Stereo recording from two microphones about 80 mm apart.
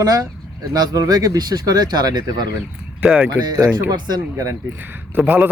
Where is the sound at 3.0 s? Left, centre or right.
Centre.